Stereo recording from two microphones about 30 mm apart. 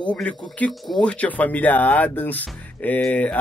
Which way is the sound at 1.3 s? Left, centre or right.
Left.